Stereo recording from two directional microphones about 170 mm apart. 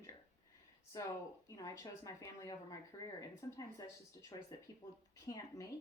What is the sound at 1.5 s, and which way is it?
A woman's voice, 20° left (ahead or behind).